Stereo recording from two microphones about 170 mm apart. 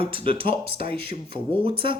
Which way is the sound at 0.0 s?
30° right (ahead or behind).